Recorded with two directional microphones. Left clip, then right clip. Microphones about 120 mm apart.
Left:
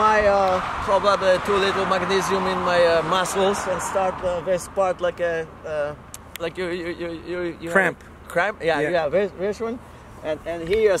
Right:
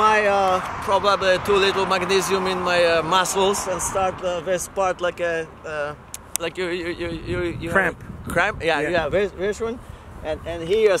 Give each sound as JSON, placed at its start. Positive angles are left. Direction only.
{"t": 0.0, "sound": "speech", "side_deg": -15}
{"t": 3.5, "sound": "speech", "side_deg": 50}
{"t": 4.0, "sound": "speech", "side_deg": -10}